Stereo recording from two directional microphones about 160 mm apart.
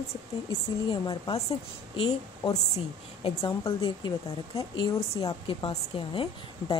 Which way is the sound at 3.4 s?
30° left (ahead or behind).